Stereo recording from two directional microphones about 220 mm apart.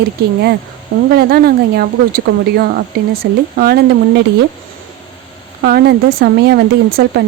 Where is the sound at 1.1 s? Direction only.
45° right (ahead or behind).